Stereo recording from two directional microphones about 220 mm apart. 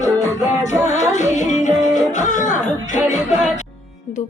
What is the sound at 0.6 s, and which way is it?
Music, 30° left (ahead or behind).